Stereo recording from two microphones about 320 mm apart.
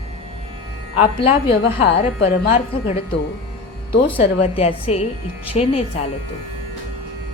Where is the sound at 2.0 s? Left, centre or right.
Centre.